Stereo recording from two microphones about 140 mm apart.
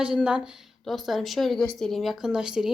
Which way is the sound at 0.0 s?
5° right (ahead or behind).